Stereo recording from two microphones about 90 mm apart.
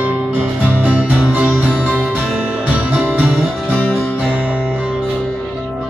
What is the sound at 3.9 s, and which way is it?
Music, 20° left (ahead or behind).